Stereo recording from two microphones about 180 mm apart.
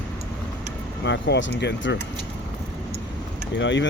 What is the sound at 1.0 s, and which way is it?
Speech, 75° left (ahead or behind).